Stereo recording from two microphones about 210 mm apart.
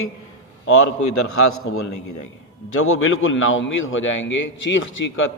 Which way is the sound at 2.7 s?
90° left.